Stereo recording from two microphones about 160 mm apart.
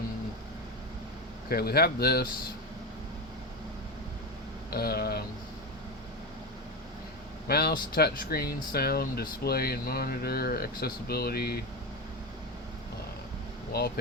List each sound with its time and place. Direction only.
1.5 s speech: 75° left (ahead or behind)
4.7 s speech: 75° left (ahead or behind)
7.4 s speech: 75° left (ahead or behind)
13.7 s speech: 75° left (ahead or behind)